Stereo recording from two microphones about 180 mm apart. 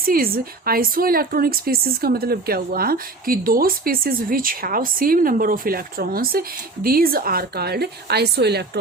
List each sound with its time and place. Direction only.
0.0 s a woman's voice: 55° right (ahead or behind)